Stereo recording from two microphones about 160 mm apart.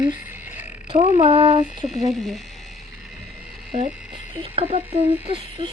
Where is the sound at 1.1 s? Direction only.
35° right (ahead or behind).